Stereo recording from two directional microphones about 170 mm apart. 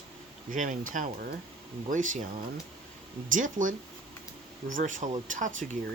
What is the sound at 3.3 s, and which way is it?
Speech, 50° right (ahead or behind).